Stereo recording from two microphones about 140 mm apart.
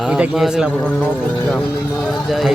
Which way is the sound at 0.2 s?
5° right (ahead or behind).